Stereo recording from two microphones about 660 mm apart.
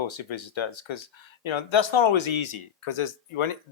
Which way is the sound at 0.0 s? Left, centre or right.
Left.